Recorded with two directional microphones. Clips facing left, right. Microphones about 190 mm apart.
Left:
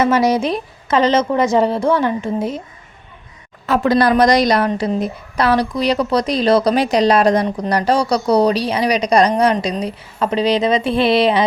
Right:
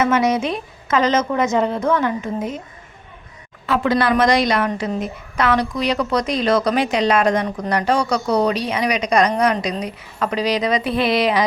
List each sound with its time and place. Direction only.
0.0 s a woman's voice: 35° left (ahead or behind)
3.7 s a woman's voice: 40° left (ahead or behind)